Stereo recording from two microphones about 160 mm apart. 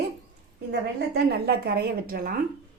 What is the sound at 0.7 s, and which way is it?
A woman's voice, 90° right.